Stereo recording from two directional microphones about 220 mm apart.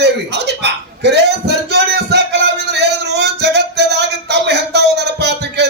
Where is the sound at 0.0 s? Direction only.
50° right (ahead or behind).